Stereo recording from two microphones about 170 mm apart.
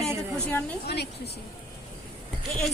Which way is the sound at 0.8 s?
75° left (ahead or behind).